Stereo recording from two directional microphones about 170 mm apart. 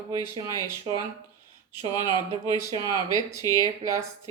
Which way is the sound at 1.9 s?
25° left (ahead or behind).